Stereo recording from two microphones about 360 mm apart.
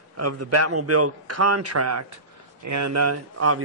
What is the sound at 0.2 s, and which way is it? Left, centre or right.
A man's voice, right.